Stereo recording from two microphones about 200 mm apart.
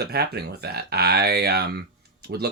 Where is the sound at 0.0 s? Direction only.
55° right (ahead or behind).